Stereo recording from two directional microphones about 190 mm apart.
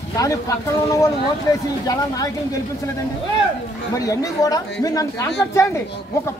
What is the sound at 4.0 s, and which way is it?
Speech, 20° left (ahead or behind).